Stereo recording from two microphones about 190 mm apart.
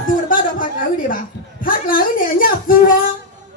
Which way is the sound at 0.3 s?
45° left (ahead or behind).